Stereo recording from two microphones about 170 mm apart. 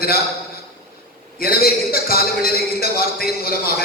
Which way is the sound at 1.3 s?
60° left (ahead or behind).